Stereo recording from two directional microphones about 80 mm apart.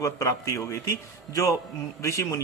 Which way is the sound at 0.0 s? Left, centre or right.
Left.